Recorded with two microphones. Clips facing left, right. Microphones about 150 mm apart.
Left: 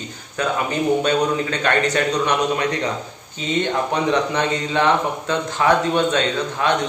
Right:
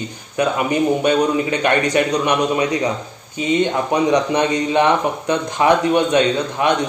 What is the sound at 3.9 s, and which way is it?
A man's voice, 15° right (ahead or behind).